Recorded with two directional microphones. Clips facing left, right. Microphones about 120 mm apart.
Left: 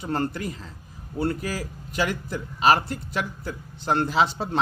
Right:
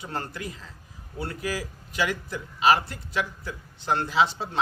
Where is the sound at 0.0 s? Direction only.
45° left (ahead or behind).